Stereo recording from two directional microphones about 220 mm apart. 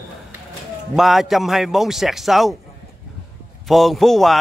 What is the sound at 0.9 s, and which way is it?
Speech, centre (ahead or behind).